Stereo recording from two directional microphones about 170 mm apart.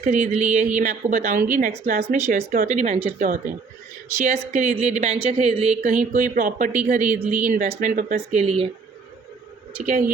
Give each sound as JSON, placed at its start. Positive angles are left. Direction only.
{"t": 0.0, "sound": "speech", "side_deg": -45}
{"t": 3.2, "sound": "speech", "side_deg": -50}